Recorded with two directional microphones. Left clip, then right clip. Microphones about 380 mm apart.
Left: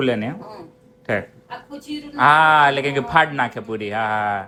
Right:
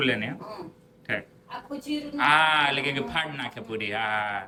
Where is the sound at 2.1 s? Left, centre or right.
Centre.